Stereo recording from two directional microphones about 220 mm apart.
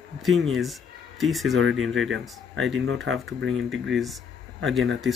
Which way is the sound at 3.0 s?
60° right (ahead or behind).